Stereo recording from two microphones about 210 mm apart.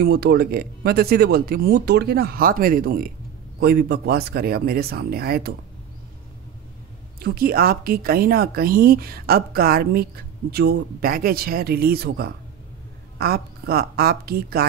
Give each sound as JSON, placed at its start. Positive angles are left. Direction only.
{"t": 0.0, "sound": "speech", "side_deg": -50}
{"t": 7.2, "sound": "speech", "side_deg": -45}